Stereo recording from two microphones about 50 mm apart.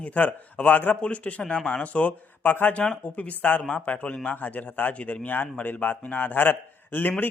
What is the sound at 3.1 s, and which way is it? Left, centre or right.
Speech, left.